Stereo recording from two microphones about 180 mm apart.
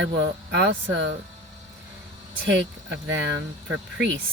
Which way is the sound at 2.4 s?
80° right.